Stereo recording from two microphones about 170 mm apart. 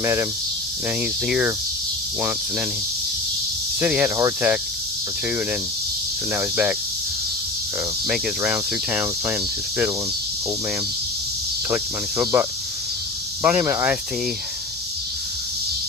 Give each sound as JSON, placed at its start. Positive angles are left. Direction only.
{"t": 0.0, "sound": "cricket", "side_deg": -15}
{"t": 1.3, "sound": "cricket", "side_deg": -5}
{"t": 3.8, "sound": "cricket", "side_deg": -10}
{"t": 6.3, "sound": "cricket", "side_deg": -10}
{"t": 8.0, "sound": "cricket", "side_deg": -5}
{"t": 12.2, "sound": "cricket", "side_deg": -15}